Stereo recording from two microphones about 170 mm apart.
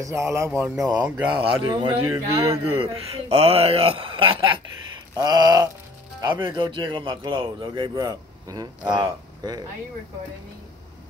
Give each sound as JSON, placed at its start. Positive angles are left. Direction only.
{"t": 0.0, "sound": "speech", "side_deg": -15}
{"t": 2.5, "sound": "speech", "side_deg": -35}